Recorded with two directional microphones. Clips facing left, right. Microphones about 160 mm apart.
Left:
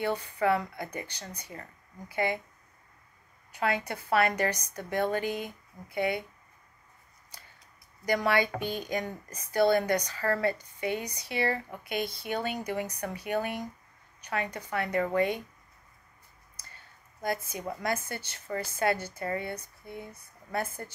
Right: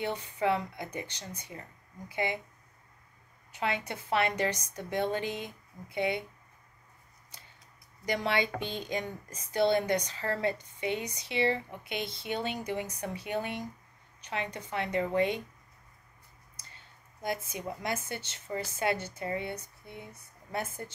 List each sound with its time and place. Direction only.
0.0 s speech: 20° right (ahead or behind)
3.5 s speech: 20° right (ahead or behind)
8.0 s speech: 25° right (ahead or behind)
17.2 s speech: 20° right (ahead or behind)